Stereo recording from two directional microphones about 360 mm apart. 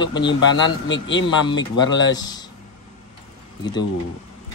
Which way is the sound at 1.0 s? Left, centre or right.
Left.